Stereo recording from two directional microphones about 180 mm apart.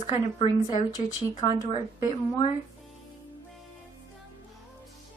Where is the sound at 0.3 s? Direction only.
30° left (ahead or behind).